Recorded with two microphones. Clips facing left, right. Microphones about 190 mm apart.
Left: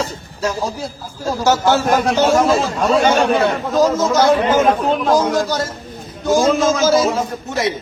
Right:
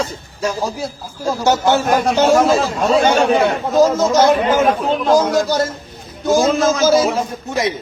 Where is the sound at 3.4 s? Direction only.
20° right (ahead or behind).